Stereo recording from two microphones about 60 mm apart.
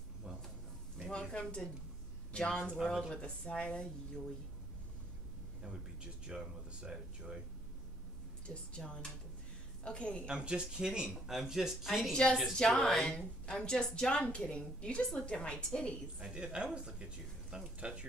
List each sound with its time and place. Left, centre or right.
0.9 s a sound: centre
2.3 s a woman's voice: centre
2.7 s speech: centre
3.1 s a woman's voice: centre
6.2 s speech: centre
8.5 s a woman's voice: centre
10.2 s speech: centre
12.1 s a woman's voice: centre
16.2 s speech: centre